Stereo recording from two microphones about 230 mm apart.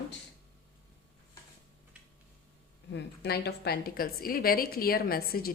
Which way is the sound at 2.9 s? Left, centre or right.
Left.